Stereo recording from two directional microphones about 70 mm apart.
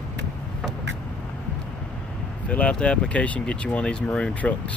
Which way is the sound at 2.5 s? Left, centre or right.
Centre.